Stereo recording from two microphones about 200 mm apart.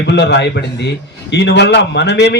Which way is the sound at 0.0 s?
60° left (ahead or behind).